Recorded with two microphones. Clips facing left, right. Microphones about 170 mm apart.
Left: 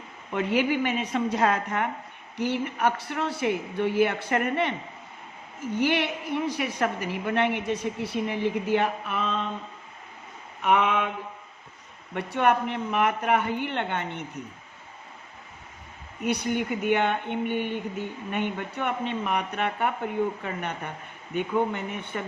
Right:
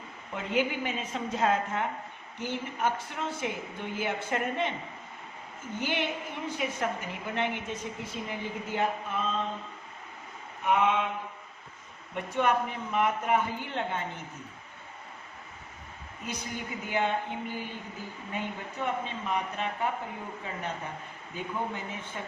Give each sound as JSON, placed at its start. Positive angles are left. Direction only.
{"t": 0.3, "sound": "speech", "side_deg": 70}
{"t": 5.7, "sound": "speech", "side_deg": 70}
{"t": 10.6, "sound": "speech", "side_deg": 75}
{"t": 12.1, "sound": "speech", "side_deg": 65}
{"t": 16.2, "sound": "speech", "side_deg": 70}